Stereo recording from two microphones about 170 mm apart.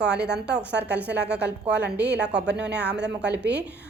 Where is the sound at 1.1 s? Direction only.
80° right.